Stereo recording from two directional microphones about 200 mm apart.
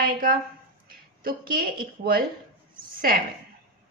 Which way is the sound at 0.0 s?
45° right (ahead or behind).